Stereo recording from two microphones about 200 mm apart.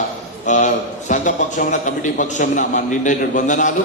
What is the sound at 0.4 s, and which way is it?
A man's voice, 40° left (ahead or behind).